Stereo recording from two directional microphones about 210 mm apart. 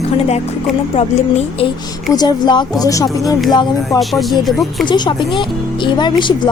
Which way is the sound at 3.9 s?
Centre (ahead or behind).